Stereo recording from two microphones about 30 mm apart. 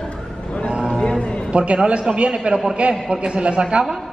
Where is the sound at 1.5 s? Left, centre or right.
Right.